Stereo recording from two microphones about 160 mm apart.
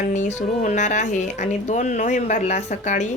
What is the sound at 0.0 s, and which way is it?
A woman's voice, 45° left (ahead or behind).